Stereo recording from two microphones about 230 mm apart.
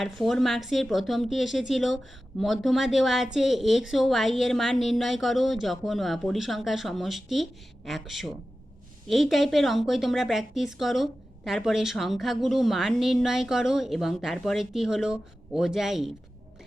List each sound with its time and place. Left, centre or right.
0.0 s a woman's voice: centre